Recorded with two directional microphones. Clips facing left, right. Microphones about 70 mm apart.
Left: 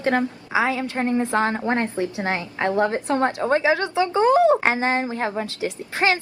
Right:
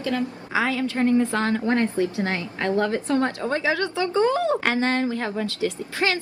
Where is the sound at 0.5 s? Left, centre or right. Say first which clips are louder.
Left 1 dB; left.